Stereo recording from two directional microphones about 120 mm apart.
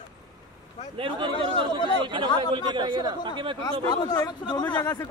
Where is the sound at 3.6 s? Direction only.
30° left (ahead or behind).